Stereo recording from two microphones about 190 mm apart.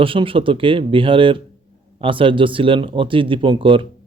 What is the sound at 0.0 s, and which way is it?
Speech, 30° right (ahead or behind).